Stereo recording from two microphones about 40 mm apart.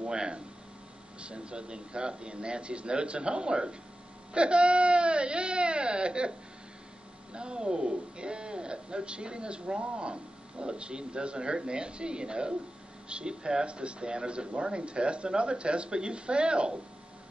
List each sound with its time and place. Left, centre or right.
0.0 s a man's voice: right
7.3 s a man's voice: right